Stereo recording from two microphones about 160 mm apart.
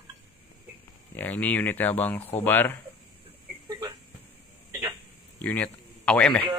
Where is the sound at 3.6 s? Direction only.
30° right (ahead or behind).